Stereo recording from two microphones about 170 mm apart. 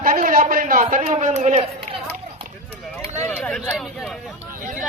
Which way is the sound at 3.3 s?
10° left (ahead or behind).